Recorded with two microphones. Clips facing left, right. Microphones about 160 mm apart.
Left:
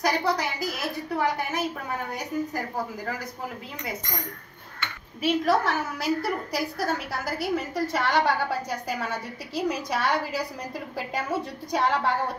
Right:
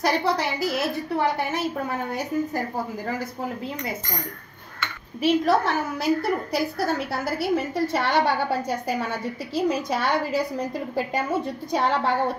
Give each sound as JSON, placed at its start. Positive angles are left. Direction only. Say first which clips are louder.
{"t": 0.0, "sound": "a woman's voice", "louder": "right 2 dB", "side_deg": -30}
{"t": 5.2, "sound": "a woman's voice", "louder": "right 3 dB", "side_deg": -25}